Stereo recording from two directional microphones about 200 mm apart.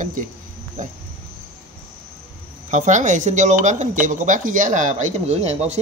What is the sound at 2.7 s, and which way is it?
Speech, 35° right (ahead or behind).